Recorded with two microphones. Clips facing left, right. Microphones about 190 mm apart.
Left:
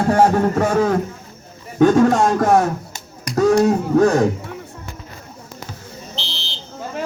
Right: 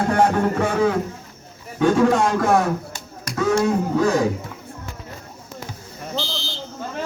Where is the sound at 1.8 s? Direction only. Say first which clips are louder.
Left 4 dB; 45° left (ahead or behind).